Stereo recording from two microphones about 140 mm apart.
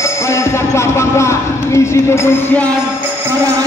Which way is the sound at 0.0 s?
20° left (ahead or behind).